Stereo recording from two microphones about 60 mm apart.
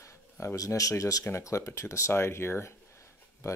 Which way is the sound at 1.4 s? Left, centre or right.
Left.